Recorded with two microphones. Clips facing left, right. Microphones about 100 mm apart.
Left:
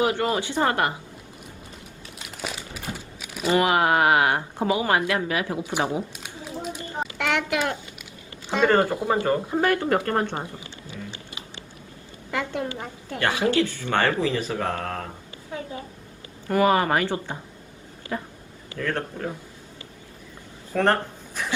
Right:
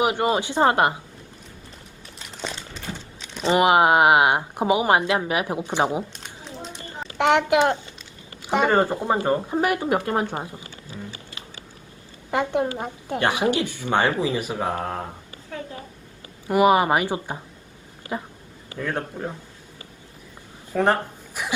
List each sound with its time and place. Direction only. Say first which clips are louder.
0.0 s speech: right 2 dB; 20° right (ahead or behind)
2.1 s crumpling: right 1 dB; 5° left (ahead or behind)
3.5 s speech: right 3 dB; 20° right (ahead or behind)
6.1 s a sound: left 3 dB; 10° left (ahead or behind)
7.2 s a woman's voice: right 8 dB; 20° right (ahead or behind)
12.3 s a woman's voice: right 5 dB; 20° right (ahead or behind)
15.5 s a woman's voice: even; 15° left (ahead or behind)
16.5 s a woman's voice: right 3 dB; 15° right (ahead or behind)
20.7 s speech: right 1 dB; 10° right (ahead or behind)